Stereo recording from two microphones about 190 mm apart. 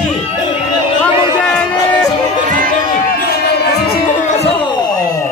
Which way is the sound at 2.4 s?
45° right (ahead or behind).